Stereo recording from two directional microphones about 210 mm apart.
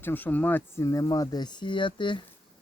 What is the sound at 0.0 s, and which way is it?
Speech, 10° left (ahead or behind).